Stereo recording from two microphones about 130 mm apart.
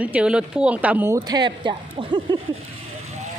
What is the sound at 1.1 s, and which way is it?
Speech, 30° right (ahead or behind).